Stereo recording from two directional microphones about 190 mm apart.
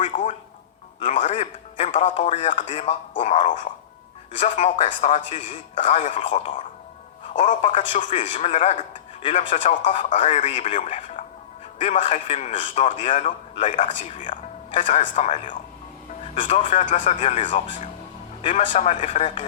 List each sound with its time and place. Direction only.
0.0 s speech: 40° left (ahead or behind)